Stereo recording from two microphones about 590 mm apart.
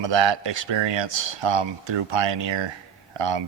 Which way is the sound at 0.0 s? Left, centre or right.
Right.